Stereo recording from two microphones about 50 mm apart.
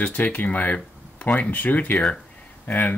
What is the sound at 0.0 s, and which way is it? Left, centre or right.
Speech, left.